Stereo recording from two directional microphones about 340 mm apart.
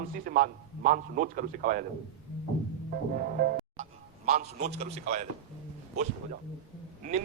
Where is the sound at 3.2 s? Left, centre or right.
Right.